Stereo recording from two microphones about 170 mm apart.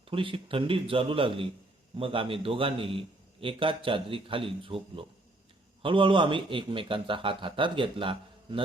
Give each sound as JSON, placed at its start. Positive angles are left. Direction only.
{"t": 0.1, "sound": "a man's voice", "side_deg": -30}